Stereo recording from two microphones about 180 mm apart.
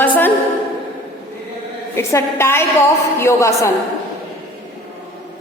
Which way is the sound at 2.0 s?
15° left (ahead or behind).